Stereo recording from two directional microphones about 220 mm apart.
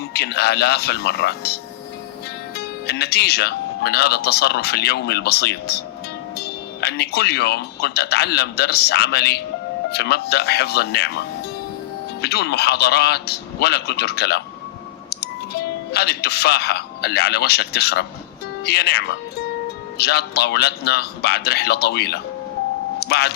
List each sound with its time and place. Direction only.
0.1 s speech: 45° left (ahead or behind)
2.6 s speech: 45° left (ahead or behind)